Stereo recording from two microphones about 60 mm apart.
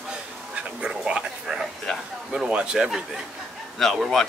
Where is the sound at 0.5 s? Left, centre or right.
Centre.